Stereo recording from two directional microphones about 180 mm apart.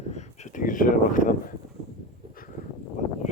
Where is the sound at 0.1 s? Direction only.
40° left (ahead or behind).